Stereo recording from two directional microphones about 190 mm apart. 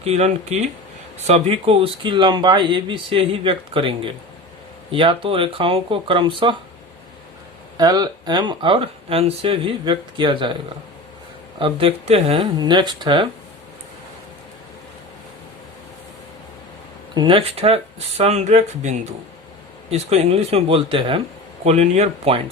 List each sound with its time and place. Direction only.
0.0 s speech: 35° right (ahead or behind)
1.3 s speech: 30° right (ahead or behind)
7.8 s speech: 20° right (ahead or behind)
11.6 s speech: 30° right (ahead or behind)
17.2 s speech: 25° right (ahead or behind)